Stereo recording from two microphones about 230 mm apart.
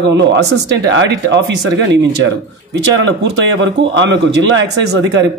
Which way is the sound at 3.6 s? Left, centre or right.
Right.